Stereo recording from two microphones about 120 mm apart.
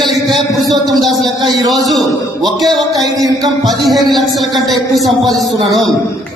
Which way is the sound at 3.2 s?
30° right (ahead or behind).